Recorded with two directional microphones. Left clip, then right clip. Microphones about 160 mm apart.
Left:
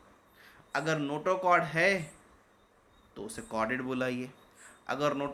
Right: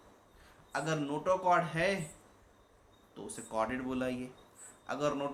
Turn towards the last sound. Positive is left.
turn(degrees=50)  # may be behind; listen again after turning